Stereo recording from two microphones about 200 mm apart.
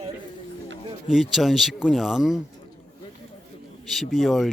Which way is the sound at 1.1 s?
Centre (ahead or behind).